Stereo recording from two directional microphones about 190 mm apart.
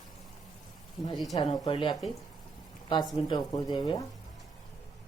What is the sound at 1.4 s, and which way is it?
Speech, 25° left (ahead or behind).